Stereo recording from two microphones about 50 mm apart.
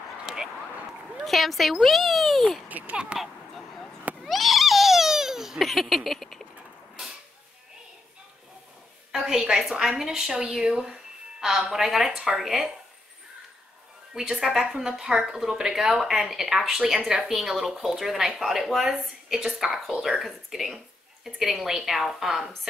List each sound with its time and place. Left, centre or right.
0.3 s a sound: centre
1.2 s speech: centre
2.8 s speech: right
3.1 s speech: right
4.3 s cat: centre
9.1 s a woman's voice: centre
14.3 s a woman's voice: centre